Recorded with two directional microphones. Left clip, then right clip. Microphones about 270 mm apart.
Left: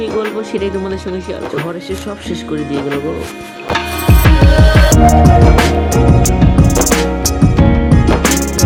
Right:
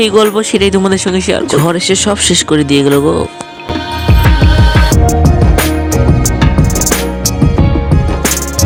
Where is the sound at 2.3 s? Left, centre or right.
Right.